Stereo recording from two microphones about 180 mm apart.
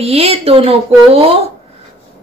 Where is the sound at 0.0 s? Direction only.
35° right (ahead or behind).